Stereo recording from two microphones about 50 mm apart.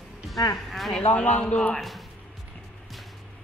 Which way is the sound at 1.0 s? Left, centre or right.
Left.